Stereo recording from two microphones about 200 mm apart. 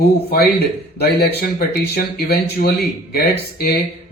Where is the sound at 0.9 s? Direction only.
55° left (ahead or behind).